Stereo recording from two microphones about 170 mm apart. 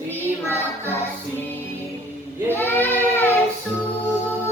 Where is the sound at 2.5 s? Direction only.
10° left (ahead or behind).